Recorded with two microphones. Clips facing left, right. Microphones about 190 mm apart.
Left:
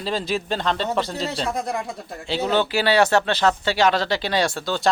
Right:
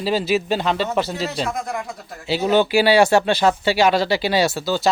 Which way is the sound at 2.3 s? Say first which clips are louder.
Right 4 dB; 10° right (ahead or behind).